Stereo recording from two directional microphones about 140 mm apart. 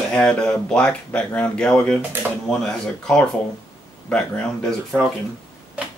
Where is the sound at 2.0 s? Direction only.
10° right (ahead or behind).